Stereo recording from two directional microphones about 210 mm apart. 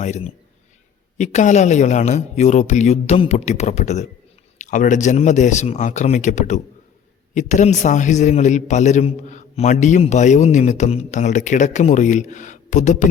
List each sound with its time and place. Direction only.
0.0 s a man's voice: 30° left (ahead or behind)